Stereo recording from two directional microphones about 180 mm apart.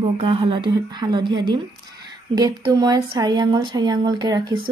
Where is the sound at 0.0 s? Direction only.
30° right (ahead or behind).